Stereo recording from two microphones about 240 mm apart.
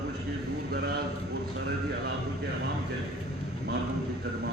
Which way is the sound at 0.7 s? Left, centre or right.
Right.